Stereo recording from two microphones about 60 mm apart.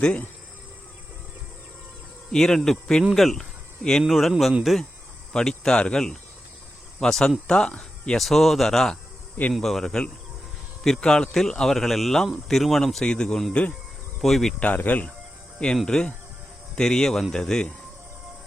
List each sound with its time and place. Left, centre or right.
2.3 s a man's voice: centre
5.3 s a man's voice: centre
13.5 s speech: left
14.2 s a man's voice: centre
14.6 s speech: left
15.5 s speech: centre